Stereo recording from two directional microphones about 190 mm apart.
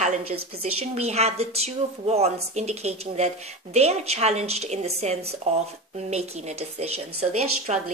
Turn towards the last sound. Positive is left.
turn(degrees=-35)  # may be behind; listen again after turning